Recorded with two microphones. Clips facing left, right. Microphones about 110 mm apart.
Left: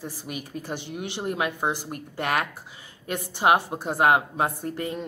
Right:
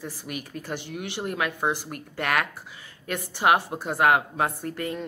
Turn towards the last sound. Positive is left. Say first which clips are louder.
# even
turn(degrees=25)  # may be behind; listen again after turning